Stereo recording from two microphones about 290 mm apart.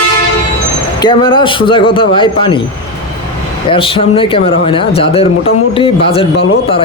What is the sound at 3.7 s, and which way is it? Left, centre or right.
A man's voice, centre.